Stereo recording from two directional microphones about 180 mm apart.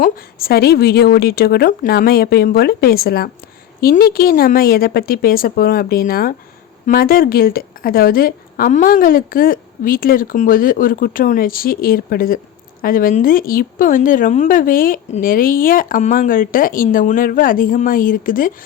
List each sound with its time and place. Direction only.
0.0 s a woman's voice: 55° left (ahead or behind)